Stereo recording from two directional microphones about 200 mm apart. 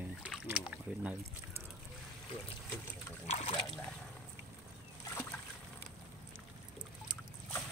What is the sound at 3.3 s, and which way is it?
Speech, 35° left (ahead or behind).